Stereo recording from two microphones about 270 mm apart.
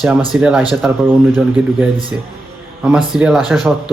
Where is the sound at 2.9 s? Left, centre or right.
Centre.